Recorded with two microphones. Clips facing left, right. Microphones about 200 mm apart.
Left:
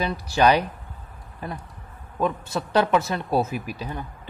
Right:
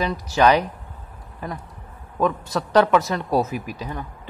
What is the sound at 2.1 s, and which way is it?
Speech, 25° left (ahead or behind).